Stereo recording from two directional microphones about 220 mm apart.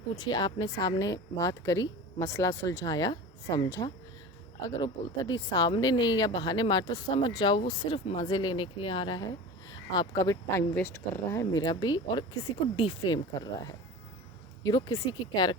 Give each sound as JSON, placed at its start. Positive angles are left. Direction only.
{"t": 0.2, "sound": "a woman's voice", "side_deg": 20}